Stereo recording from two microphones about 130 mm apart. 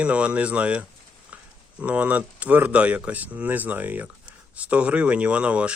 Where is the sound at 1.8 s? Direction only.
10° right (ahead or behind).